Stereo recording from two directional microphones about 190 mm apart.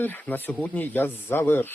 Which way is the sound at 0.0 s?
10° left (ahead or behind).